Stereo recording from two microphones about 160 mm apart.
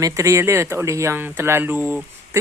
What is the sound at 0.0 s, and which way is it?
Speech, 20° right (ahead or behind).